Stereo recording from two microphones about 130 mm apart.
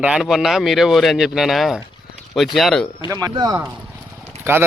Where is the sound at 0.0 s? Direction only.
5° right (ahead or behind).